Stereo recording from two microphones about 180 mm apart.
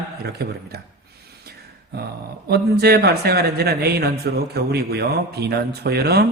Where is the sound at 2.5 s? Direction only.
60° right (ahead or behind).